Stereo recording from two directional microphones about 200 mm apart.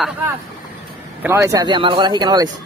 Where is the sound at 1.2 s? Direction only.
15° right (ahead or behind).